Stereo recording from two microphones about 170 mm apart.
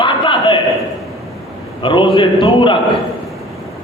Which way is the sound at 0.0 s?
25° left (ahead or behind).